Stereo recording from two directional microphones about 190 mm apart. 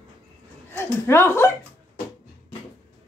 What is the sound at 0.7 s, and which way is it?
Speech, 10° left (ahead or behind).